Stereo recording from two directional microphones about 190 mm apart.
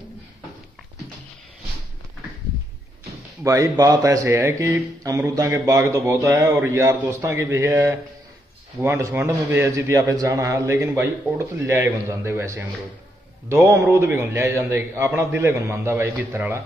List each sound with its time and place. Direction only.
3.4 s speech: 15° right (ahead or behind)